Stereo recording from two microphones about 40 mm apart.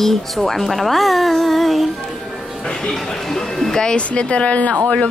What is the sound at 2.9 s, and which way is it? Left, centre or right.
Speech, centre.